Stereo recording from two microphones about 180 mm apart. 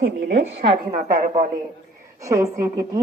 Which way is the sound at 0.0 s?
55° right (ahead or behind).